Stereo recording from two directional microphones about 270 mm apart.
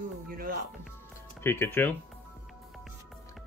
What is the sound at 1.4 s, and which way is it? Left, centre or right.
Speech, centre.